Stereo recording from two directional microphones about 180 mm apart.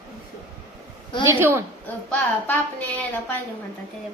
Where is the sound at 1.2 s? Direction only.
10° right (ahead or behind).